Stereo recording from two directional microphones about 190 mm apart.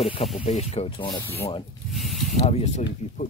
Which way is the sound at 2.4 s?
35° left (ahead or behind).